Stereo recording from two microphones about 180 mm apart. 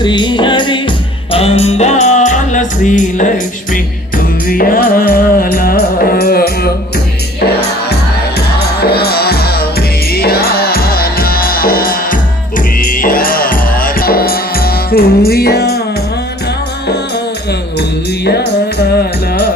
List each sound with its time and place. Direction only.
0.0 s music: 25° left (ahead or behind); by 6.7 s 60° left (ahead or behind)
8.5 s music: 60° left (ahead or behind)
18.3 s music: 65° left (ahead or behind)